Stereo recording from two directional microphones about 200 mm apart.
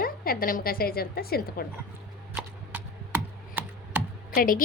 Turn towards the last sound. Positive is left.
turn(degrees=45)  # may be behind; listen again after turning